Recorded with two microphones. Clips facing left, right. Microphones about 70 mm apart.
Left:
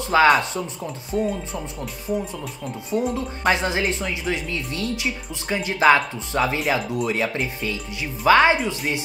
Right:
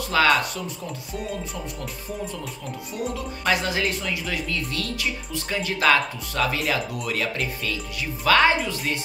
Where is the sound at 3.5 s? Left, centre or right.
Left.